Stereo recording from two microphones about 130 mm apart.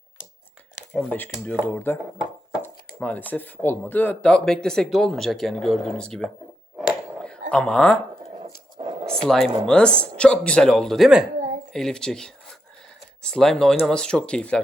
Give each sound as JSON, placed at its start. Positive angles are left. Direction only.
{"t": 0.9, "sound": "speech", "side_deg": 15}
{"t": 7.5, "sound": "speech", "side_deg": 10}
{"t": 8.8, "sound": "a sound", "side_deg": -40}
{"t": 9.0, "sound": "speech", "side_deg": 5}